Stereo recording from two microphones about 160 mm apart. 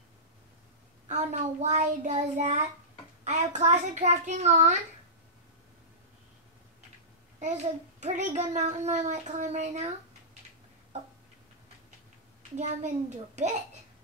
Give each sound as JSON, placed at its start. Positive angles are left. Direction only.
{"t": 1.0, "sound": "a woman's voice", "side_deg": -45}
{"t": 8.0, "sound": "a woman's voice", "side_deg": -50}
{"t": 12.5, "sound": "a woman's voice", "side_deg": -45}